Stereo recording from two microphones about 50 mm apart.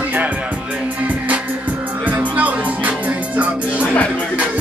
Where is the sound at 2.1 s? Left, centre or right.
Right.